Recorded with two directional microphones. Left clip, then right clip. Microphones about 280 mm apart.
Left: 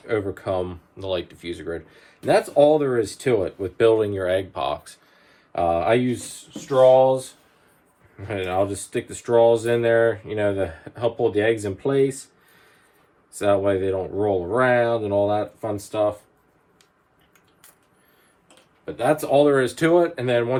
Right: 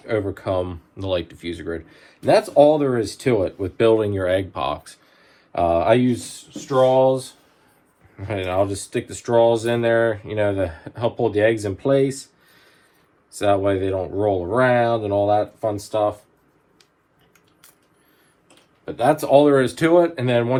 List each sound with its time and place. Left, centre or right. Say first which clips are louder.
0.0 s speech: right 1 dB; centre
6.1 s speech: right 3 dB; centre
8.2 s speech: right 2 dB; centre
13.4 s speech: right 1 dB; centre
18.9 s speech: right 3 dB; centre
19.2 s speech: right 3 dB; centre